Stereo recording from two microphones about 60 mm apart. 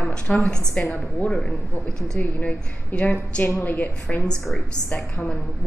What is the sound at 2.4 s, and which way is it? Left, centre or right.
A woman's voice, left.